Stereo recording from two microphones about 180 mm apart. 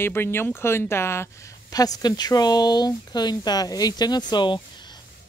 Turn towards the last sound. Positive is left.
turn(degrees=25)  # may be behind; listen again after turning